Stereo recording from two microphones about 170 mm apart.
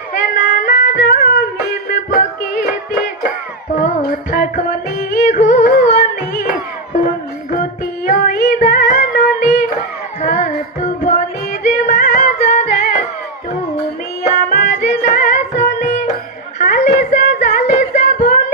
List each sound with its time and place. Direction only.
0.6 s music: 55° left (ahead or behind)
7.5 s music: 55° left (ahead or behind)
14.5 s music: 65° left (ahead or behind)
15.0 s music: 45° left (ahead or behind)
16.9 s a sound: 45° left (ahead or behind)